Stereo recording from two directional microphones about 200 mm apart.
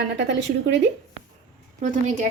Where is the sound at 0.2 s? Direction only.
60° right (ahead or behind).